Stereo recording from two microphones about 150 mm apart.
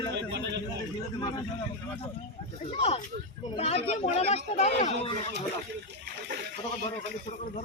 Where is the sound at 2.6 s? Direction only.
40° left (ahead or behind).